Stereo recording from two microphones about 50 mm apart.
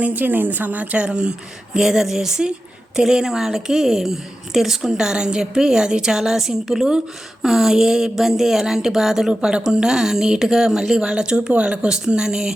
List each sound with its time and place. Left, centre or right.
0.0 s speech: right; by 12.5 s centre